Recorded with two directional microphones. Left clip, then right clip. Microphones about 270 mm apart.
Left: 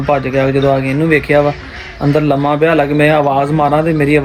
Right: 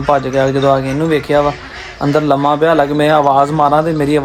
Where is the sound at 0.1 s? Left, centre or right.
Centre.